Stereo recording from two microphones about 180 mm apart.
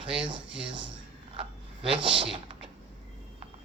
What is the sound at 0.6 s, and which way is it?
Speech, 25° right (ahead or behind).